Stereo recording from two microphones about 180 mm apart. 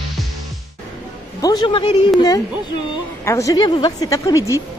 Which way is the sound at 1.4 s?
20° left (ahead or behind).